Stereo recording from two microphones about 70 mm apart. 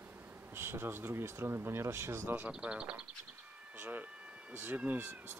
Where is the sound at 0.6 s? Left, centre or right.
Right.